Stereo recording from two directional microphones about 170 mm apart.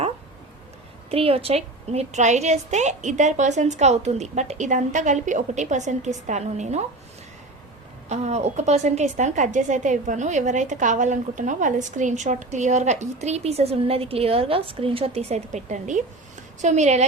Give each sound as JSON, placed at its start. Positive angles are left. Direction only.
{"t": 1.1, "sound": "a woman's voice", "side_deg": -35}
{"t": 8.1, "sound": "a woman's voice", "side_deg": -40}